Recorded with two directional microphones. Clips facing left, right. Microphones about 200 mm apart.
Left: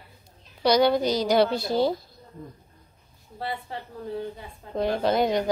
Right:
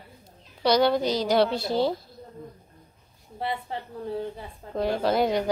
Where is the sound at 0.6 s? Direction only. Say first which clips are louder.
Left 1 dB; centre (ahead or behind).